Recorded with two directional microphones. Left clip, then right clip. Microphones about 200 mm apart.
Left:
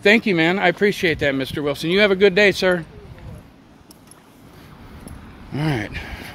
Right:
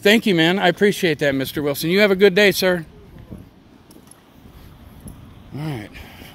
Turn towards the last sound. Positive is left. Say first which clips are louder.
# left 7 dB
turn(degrees=20)  # may be behind; listen again after turning